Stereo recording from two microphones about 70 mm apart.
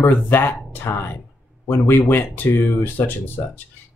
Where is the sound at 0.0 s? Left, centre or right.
Left.